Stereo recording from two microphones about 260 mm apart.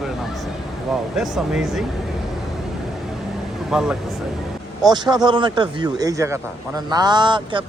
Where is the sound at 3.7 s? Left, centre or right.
Centre.